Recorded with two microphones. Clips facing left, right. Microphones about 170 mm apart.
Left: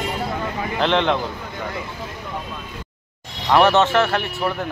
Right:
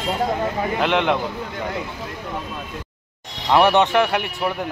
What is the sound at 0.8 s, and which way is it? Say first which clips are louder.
Speech: left 2 dB; 10° right (ahead or behind).